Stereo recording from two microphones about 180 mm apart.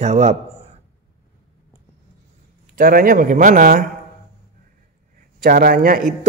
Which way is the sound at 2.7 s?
50° right (ahead or behind).